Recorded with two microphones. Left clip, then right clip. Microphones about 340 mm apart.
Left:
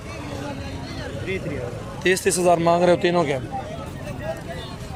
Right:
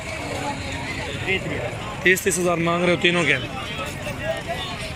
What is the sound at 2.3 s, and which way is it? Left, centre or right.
Speech, left.